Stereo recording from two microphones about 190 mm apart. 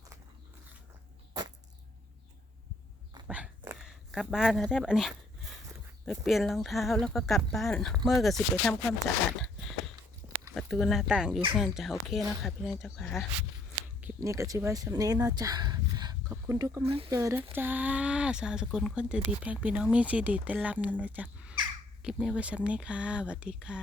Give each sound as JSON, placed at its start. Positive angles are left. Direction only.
{"t": 1.3, "sound": "arrow", "side_deg": -20}
{"t": 3.2, "sound": "dog", "side_deg": -5}
{"t": 6.1, "sound": "speech", "side_deg": 0}
{"t": 9.9, "sound": "a sound", "side_deg": -25}
{"t": 10.5, "sound": "speech", "side_deg": 0}
{"t": 14.2, "sound": "speech", "side_deg": -15}
{"t": 16.8, "sound": "speech", "side_deg": -30}
{"t": 17.1, "sound": "speech", "side_deg": -15}